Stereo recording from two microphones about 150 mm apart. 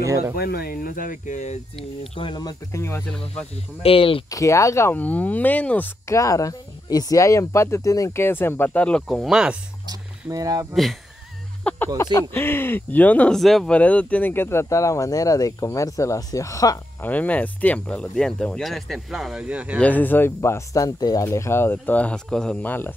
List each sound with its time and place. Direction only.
0.0 s speech: 20° right (ahead or behind)
0.4 s speech: 90° left; by 1.6 s 50° left (ahead or behind)
2.1 s speech: 30° left (ahead or behind)
3.8 s speech: 40° left (ahead or behind)
4.3 s speech: 20° left (ahead or behind); by 9.6 s 5° right (ahead or behind)
9.8 s a sound: 25° right (ahead or behind)
10.7 s speech: centre (ahead or behind)
11.7 s a sound: 10° left (ahead or behind)
12.0 s speech: 20° left (ahead or behind)
17.0 s speech: 10° left (ahead or behind); by 19.8 s 10° right (ahead or behind)
19.8 s speech: 10° left (ahead or behind)